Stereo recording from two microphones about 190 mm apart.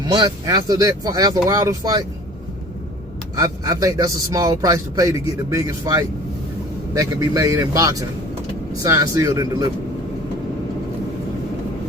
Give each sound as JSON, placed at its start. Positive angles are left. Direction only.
{"t": 0.0, "sound": "speech", "side_deg": -25}
{"t": 3.3, "sound": "speech", "side_deg": -20}